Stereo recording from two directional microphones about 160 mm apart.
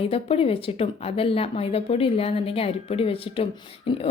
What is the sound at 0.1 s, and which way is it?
A woman's voice, 35° left (ahead or behind).